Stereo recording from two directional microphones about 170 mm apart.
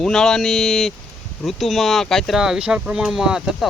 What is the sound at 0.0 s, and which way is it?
Speech, 5° left (ahead or behind).